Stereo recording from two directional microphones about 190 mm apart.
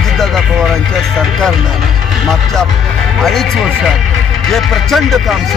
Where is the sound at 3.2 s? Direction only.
Centre (ahead or behind).